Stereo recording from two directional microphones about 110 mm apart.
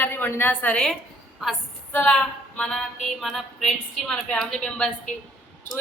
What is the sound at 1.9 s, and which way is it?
A woman's voice, 15° left (ahead or behind).